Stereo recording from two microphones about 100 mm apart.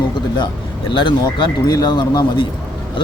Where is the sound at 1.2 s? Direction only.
45° left (ahead or behind).